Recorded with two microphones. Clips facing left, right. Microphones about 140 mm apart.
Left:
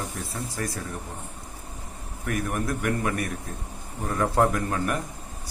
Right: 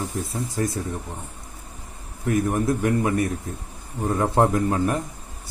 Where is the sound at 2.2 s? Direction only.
25° right (ahead or behind).